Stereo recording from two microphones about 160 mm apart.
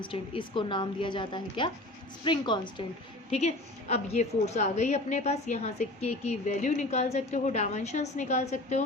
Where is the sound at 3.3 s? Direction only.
40° left (ahead or behind).